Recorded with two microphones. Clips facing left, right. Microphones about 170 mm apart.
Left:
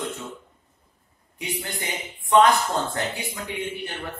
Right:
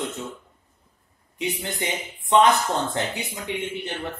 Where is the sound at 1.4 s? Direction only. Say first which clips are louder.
Right 4 dB; 20° right (ahead or behind).